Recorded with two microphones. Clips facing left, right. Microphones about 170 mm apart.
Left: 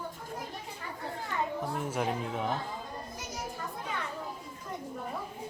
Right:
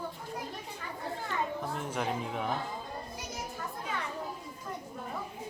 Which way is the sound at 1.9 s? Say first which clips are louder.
Even; 5° left (ahead or behind).